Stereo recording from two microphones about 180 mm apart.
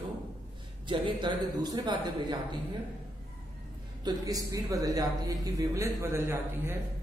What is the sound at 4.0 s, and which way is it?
A woman's voice, 20° right (ahead or behind).